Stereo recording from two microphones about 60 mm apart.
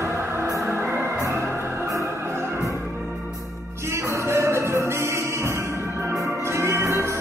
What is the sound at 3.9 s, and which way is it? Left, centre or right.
Music, right.